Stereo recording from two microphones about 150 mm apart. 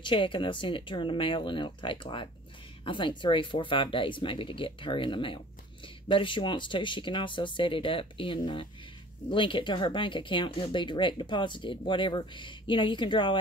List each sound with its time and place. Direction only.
0.0 s speech: 35° left (ahead or behind)